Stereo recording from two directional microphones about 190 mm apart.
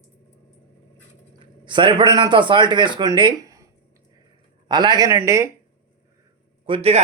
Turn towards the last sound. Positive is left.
turn(degrees=-35)  # may be behind; listen again after turning